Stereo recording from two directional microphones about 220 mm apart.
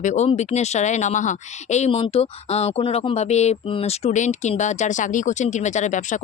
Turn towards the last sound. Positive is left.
turn(degrees=35)  # may be behind; listen again after turning